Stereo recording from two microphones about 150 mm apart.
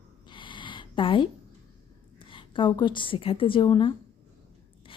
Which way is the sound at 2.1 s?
35° left (ahead or behind).